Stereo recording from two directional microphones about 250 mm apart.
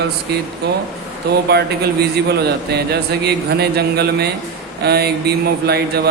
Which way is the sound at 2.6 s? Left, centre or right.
Right.